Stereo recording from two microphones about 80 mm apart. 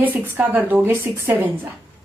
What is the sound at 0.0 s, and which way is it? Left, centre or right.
A woman's voice, right.